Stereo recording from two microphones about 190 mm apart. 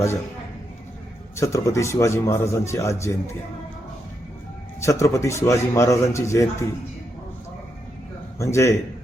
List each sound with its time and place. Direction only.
1.4 s a man's voice: 15° left (ahead or behind)
4.8 s a man's voice: 15° left (ahead or behind)
8.4 s a man's voice: 15° left (ahead or behind)